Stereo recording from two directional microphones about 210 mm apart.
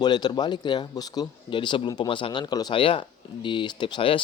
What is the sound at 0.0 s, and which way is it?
Speech, 20° left (ahead or behind).